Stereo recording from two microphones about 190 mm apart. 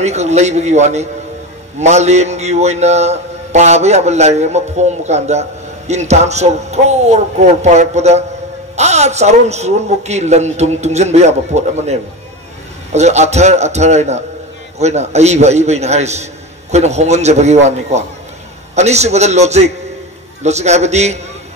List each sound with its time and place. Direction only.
0.0 s a man's voice: 35° right (ahead or behind)